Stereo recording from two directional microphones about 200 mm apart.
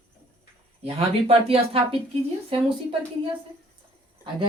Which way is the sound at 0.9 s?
30° right (ahead or behind).